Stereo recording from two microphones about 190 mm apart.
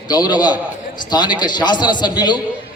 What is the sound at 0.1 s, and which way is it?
A man's voice, 20° left (ahead or behind).